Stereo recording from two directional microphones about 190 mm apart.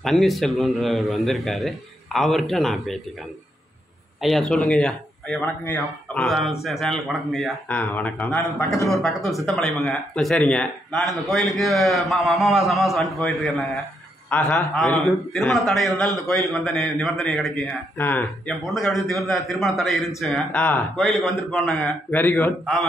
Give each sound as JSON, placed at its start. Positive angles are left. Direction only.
{"t": 0.0, "sound": "speech", "side_deg": 0}
{"t": 4.2, "sound": "a man's voice", "side_deg": 0}